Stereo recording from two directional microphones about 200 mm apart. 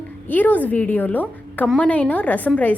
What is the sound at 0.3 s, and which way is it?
A woman's voice, 10° left (ahead or behind).